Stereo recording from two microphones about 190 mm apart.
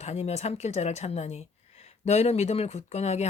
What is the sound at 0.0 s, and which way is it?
A woman's voice, 35° left (ahead or behind).